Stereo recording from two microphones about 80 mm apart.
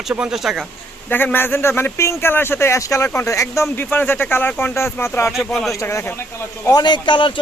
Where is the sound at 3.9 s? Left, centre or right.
Left.